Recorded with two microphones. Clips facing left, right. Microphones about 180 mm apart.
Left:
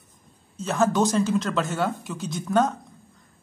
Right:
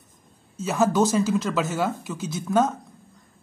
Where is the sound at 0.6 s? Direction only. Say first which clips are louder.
Right 1 dB; 5° right (ahead or behind).